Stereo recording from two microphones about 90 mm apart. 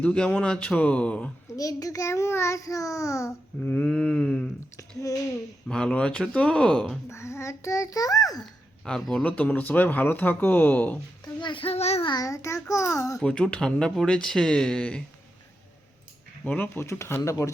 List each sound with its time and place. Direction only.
0.0 s speech: 15° left (ahead or behind)
1.5 s a child's voice: 40° left (ahead or behind)
3.6 s speech: 15° left (ahead or behind)
5.6 s speech: 10° left (ahead or behind)
7.1 s a child's voice: 30° left (ahead or behind)
8.8 s speech: 5° left (ahead or behind)
9.2 s speech: 15° left (ahead or behind)
11.3 s a child's voice: 65° left (ahead or behind)
12.1 s a child's voice: 40° left (ahead or behind)
13.1 s speech: 10° left (ahead or behind)
16.4 s a child's voice: 20° left (ahead or behind); by 17.5 s 35° left (ahead or behind)